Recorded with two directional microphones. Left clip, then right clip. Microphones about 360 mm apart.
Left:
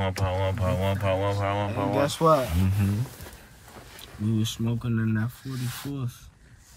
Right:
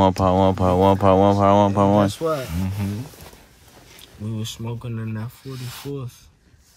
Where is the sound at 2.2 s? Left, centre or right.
Left.